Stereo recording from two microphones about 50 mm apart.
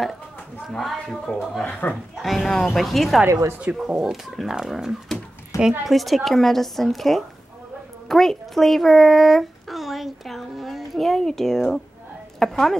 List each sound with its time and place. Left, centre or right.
0.7 s a woman's voice: centre
1.6 s speech: left
2.2 s a woman's voice: centre
3.3 s speech: right
3.7 s a woman's voice: centre